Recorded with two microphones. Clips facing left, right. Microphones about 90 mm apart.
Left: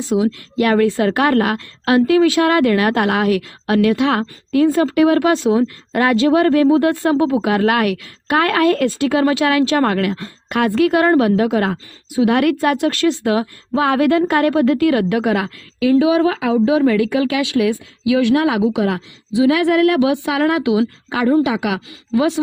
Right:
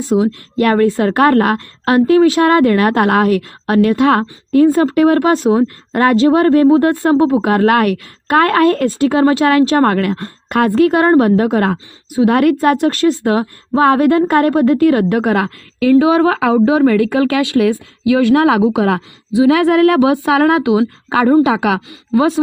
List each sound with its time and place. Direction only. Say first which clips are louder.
0.1 s a woman's voice: right 3 dB; 35° right (ahead or behind)